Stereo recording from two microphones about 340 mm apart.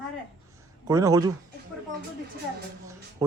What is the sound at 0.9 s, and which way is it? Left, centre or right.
Speech, centre.